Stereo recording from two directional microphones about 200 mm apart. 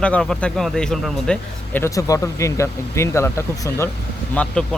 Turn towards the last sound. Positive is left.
turn(degrees=5)  # may be behind; listen again after turning